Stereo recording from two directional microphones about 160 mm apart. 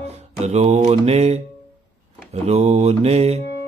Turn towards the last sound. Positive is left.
turn(degrees=-40)  # may be behind; listen again after turning